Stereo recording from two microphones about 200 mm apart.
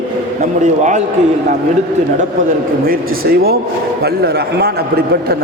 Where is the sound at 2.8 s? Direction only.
50° right (ahead or behind).